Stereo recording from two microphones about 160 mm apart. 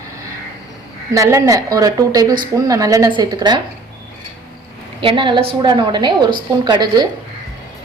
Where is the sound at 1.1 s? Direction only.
20° right (ahead or behind).